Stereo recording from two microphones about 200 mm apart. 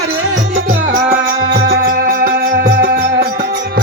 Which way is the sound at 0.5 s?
40° right (ahead or behind).